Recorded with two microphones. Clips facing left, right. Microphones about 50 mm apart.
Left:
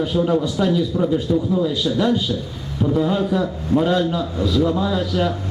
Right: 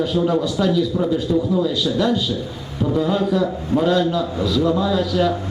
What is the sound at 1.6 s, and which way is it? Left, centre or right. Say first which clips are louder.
A man's voice: even; centre.